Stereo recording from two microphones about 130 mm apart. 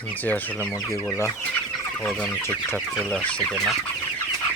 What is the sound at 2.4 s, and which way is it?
Chicken, 15° left (ahead or behind).